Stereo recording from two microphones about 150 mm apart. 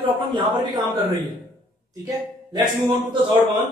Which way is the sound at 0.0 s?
30° right (ahead or behind).